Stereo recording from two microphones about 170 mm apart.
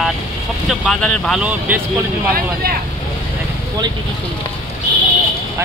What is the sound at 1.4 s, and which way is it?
Speech, 10° right (ahead or behind).